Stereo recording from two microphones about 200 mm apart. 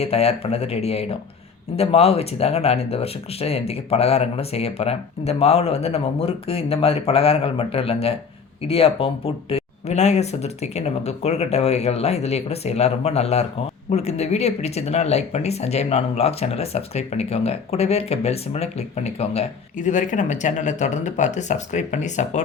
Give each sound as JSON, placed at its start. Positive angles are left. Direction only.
{"t": 0.0, "sound": "speech", "side_deg": 30}